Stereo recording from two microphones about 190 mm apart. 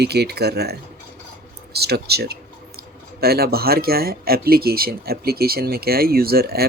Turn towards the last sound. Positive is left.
turn(degrees=-55)  # may be behind; listen again after turning